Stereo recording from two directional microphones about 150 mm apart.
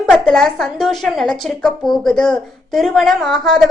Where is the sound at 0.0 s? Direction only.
5° left (ahead or behind).